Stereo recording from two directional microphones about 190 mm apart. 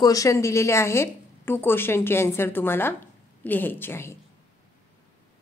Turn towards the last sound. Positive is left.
turn(degrees=10)  # may be behind; listen again after turning